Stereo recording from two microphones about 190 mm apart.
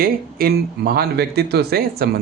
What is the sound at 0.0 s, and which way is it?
Speech, 50° right (ahead or behind).